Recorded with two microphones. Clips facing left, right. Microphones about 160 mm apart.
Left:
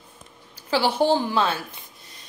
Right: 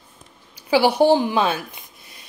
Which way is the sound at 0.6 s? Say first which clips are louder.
Right 5 dB; 15° right (ahead or behind).